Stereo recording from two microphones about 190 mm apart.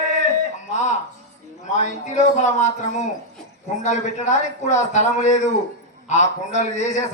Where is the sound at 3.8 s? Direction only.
40° left (ahead or behind).